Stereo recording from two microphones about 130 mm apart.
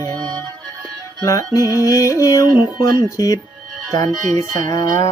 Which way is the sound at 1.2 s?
25° left (ahead or behind).